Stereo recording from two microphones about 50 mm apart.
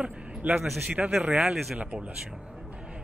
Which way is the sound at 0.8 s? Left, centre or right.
Right.